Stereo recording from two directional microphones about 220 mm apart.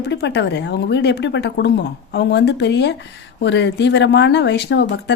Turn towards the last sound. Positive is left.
turn(degrees=50)  # may be behind; listen again after turning